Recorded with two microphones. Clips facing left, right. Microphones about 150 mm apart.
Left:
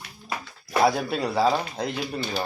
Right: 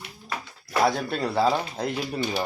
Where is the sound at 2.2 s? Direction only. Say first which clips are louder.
Right 3 dB; 15° right (ahead or behind).